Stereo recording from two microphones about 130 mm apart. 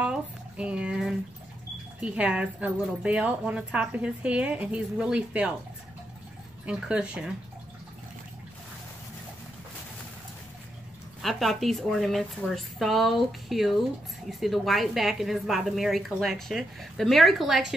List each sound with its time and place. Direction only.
0.0 s a sound: 10° right (ahead or behind)
2.0 s a woman's voice: 10° right (ahead or behind)
6.6 s a woman's voice: 10° right (ahead or behind)
11.2 s a woman's voice: centre (ahead or behind)